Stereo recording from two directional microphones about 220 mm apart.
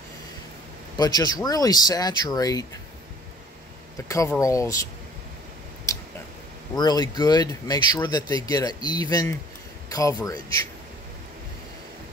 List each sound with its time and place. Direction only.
0.9 s speech: 20° left (ahead or behind)
4.1 s speech: 15° left (ahead or behind)
5.9 s tick-tock: 15° left (ahead or behind)
6.8 s speech: 20° left (ahead or behind)